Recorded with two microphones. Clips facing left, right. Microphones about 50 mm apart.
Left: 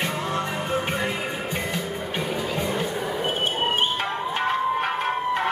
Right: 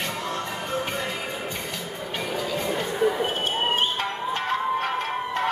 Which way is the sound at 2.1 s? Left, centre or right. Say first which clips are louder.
Even; centre.